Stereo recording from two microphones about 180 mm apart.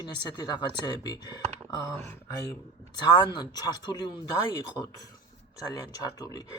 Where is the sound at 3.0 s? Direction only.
25° left (ahead or behind).